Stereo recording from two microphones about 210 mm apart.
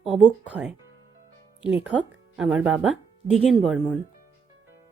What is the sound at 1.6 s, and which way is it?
Speech, 60° right (ahead or behind).